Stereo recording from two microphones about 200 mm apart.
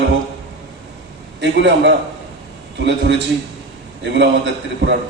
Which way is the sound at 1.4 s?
60° right (ahead or behind).